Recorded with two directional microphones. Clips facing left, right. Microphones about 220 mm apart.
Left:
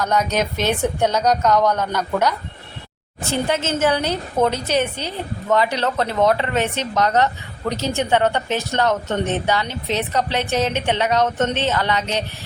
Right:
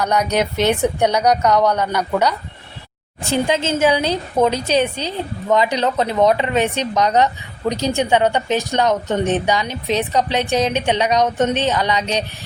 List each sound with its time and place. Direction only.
0.0 s a woman's voice: 15° right (ahead or behind)